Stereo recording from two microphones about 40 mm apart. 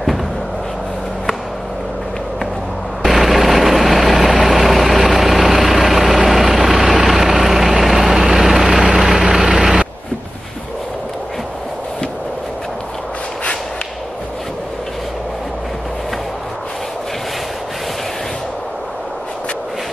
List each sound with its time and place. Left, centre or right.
3.0 s vehicle: centre
4.9 s vehicle: centre
5.2 s vehicle: centre